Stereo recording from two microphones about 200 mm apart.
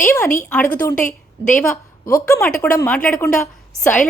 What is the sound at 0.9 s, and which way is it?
Speech, 40° left (ahead or behind).